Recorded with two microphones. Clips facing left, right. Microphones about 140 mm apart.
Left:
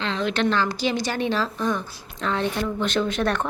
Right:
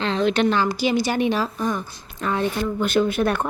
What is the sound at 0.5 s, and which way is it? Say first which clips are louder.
A woman's voice: right 3 dB; 10° right (ahead or behind).